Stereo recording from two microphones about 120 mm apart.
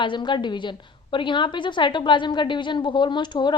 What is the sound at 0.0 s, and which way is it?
A woman's voice, 40° left (ahead or behind).